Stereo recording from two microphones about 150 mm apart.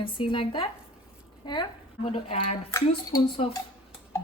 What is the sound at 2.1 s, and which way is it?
Speech, 45° left (ahead or behind).